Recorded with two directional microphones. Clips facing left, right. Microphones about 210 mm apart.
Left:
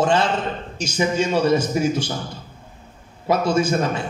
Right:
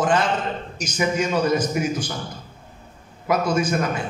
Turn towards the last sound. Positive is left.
turn(degrees=25)  # may be behind; listen again after turning